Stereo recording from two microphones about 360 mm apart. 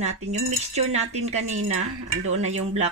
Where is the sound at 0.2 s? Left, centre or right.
Centre.